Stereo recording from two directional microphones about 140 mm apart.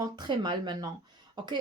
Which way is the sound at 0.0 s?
35° right (ahead or behind).